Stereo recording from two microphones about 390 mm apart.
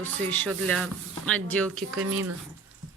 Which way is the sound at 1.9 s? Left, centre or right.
Right.